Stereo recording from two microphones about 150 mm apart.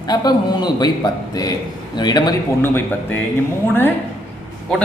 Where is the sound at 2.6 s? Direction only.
15° left (ahead or behind).